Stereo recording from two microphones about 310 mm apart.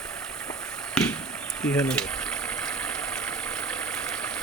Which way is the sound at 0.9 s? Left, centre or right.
Centre.